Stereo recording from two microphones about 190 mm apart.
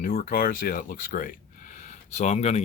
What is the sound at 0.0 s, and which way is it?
Speech, 50° left (ahead or behind).